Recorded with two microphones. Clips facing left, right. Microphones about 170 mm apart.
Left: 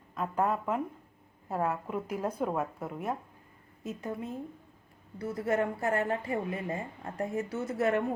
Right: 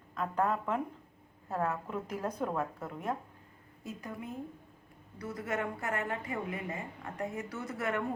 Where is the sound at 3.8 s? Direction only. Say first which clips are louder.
Left 5 dB; 25° left (ahead or behind).